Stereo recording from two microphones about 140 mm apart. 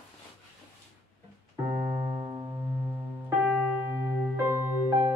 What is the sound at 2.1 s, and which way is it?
Music, 25° right (ahead or behind).